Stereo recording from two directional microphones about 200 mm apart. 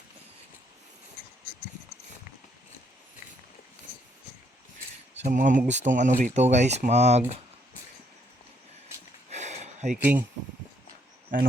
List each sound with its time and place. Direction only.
5.2 s speech: 40° right (ahead or behind)
9.3 s a sound: 35° right (ahead or behind)
9.9 s speech: 10° right (ahead or behind)